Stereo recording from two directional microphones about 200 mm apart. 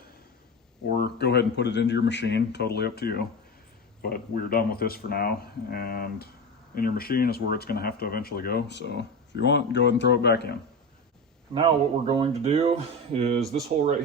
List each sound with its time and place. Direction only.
0.9 s speech: 55° left (ahead or behind)
11.5 s speech: 25° right (ahead or behind)